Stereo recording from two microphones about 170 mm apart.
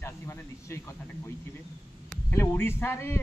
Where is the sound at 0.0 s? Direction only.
15° left (ahead or behind).